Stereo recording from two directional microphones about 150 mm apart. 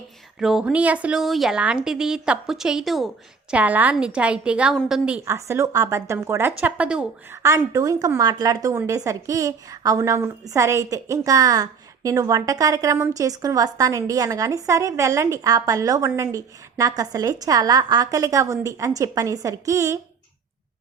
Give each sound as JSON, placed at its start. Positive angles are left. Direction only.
{"t": 0.3, "sound": "a woman's voice", "side_deg": 0}
{"t": 5.2, "sound": "a woman's voice", "side_deg": -20}
{"t": 7.4, "sound": "a woman's voice", "side_deg": -20}